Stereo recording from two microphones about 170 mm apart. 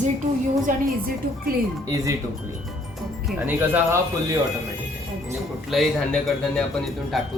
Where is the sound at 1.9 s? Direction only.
20° right (ahead or behind).